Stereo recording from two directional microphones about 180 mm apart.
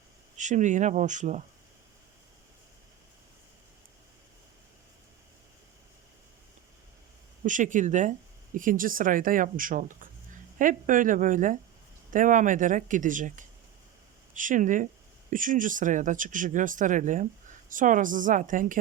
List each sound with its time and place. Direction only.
0.3 s speech: 40° right (ahead or behind)
7.4 s speech: 45° right (ahead or behind)